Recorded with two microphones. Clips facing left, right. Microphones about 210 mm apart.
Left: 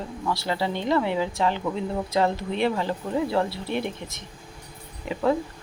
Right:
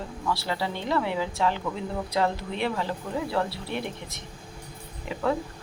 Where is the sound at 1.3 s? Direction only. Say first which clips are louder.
Left 2 dB; 20° left (ahead or behind).